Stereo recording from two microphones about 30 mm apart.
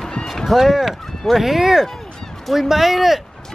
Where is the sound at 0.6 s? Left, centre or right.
Centre.